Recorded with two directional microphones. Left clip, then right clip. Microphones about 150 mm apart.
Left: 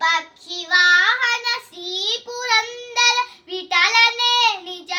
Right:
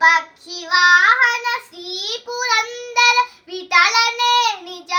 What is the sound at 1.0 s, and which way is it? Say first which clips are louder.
Child singing: right 4 dB; 30° left (ahead or behind).